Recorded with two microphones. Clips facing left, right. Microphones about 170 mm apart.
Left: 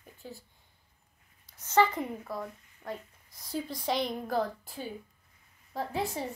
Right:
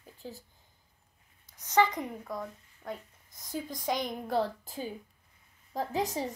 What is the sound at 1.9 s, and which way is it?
Speech, 5° left (ahead or behind).